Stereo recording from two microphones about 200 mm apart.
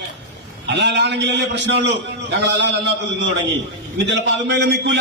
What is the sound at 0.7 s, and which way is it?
A man's voice, 60° right (ahead or behind).